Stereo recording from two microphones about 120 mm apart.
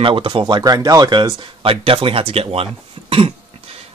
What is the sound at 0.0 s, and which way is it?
Speech, 45° right (ahead or behind).